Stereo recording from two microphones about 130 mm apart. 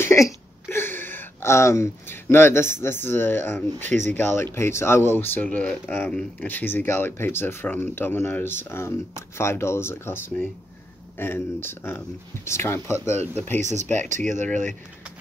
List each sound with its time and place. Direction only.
0.0 s speech: 20° left (ahead or behind)
13.6 s speech: 65° right (ahead or behind)